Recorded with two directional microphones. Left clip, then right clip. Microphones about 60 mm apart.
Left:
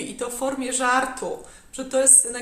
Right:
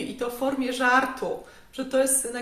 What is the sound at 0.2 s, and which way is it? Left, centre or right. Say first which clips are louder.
A man's voice: left 1 dB; left.